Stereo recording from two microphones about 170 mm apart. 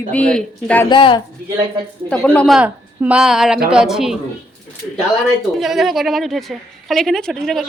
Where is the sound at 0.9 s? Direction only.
30° left (ahead or behind).